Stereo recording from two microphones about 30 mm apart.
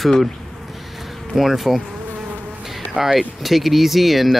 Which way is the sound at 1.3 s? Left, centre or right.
Centre.